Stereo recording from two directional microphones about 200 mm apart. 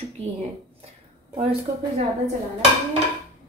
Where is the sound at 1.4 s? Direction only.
30° right (ahead or behind).